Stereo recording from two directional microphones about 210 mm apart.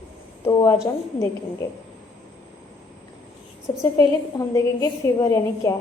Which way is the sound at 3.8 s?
15° left (ahead or behind).